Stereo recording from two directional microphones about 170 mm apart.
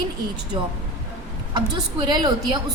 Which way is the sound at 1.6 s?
25° right (ahead or behind).